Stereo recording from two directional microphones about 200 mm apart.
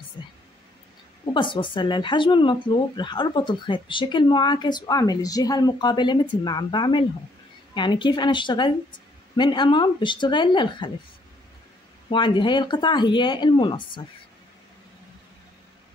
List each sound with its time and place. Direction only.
0.2 s a sound: 20° left (ahead or behind)
1.3 s speech: 25° left (ahead or behind)
12.1 s speech: 25° left (ahead or behind)